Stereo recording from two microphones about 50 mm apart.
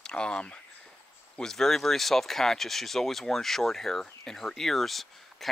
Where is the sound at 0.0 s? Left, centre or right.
Centre.